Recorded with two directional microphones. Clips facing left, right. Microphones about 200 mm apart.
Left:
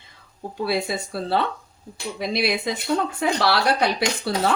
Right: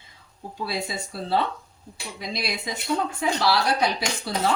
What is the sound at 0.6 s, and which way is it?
Speech, 60° left (ahead or behind).